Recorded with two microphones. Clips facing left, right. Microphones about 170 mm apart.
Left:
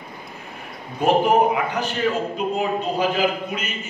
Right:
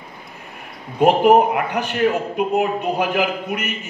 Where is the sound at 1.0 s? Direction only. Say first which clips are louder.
Right 4 dB; 65° right (ahead or behind).